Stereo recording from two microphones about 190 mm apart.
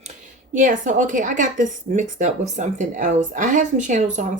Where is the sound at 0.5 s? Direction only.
45° right (ahead or behind).